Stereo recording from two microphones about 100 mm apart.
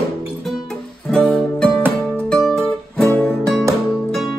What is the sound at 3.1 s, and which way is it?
Music, 20° left (ahead or behind).